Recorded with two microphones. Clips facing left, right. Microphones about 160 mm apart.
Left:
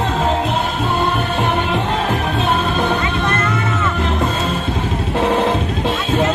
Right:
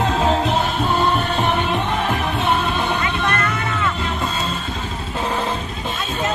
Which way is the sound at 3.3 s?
25° left (ahead or behind).